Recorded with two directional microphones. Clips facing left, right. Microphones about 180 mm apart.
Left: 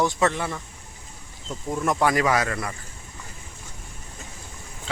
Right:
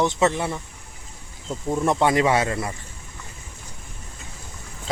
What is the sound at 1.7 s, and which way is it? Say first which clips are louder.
Speech: right 2 dB; 25° right (ahead or behind).